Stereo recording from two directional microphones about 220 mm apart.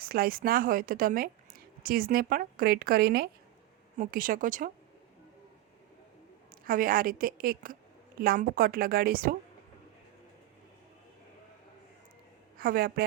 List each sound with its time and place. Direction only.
0.0 s speech: 40° right (ahead or behind)
6.7 s speech: 40° right (ahead or behind)
12.5 s a woman's voice: 40° right (ahead or behind)